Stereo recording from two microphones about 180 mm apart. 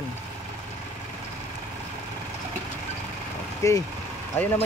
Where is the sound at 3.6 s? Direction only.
15° left (ahead or behind).